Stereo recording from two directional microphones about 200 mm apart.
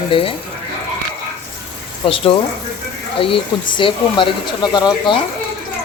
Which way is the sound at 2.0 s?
25° left (ahead or behind).